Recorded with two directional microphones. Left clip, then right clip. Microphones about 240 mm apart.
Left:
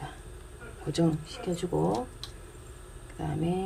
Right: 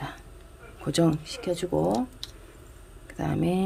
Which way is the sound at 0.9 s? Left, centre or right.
Right.